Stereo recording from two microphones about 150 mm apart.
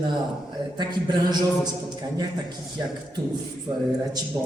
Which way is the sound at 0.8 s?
30° right (ahead or behind).